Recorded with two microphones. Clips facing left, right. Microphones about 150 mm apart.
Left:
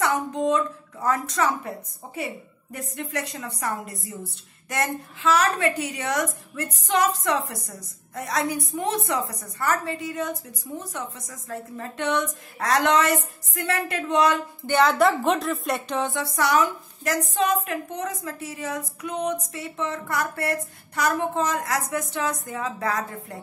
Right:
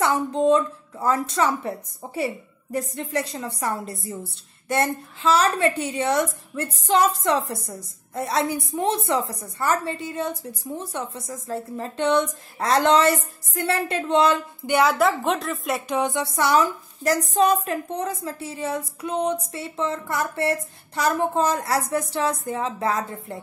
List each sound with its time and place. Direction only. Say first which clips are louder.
0.0 s a woman's voice: right 3 dB; 30° right (ahead or behind)
14.7 s a woman's voice: even; 10° right (ahead or behind)
16.0 s a woman's voice: right 3 dB; 20° right (ahead or behind)
16.3 s a woman's voice: right 1 dB; 30° right (ahead or behind)